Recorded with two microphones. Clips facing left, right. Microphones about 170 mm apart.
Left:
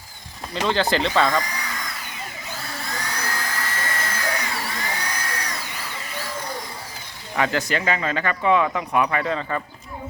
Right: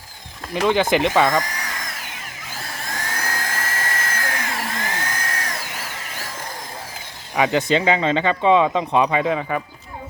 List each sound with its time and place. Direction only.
0.5 s speech: 15° right (ahead or behind)
1.4 s a sound: 45° right (ahead or behind)
7.3 s speech: 15° right (ahead or behind)